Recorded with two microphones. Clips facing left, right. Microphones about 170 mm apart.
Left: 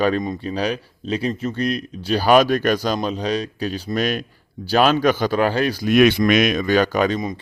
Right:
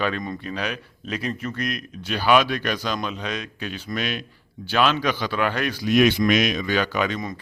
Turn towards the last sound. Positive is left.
turn(degrees=40)  # may be behind; listen again after turning